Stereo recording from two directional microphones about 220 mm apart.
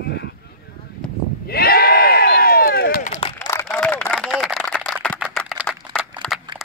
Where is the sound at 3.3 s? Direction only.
10° left (ahead or behind).